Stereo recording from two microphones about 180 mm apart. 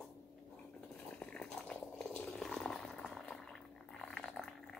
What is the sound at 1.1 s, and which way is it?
Boiling, 5° left (ahead or behind).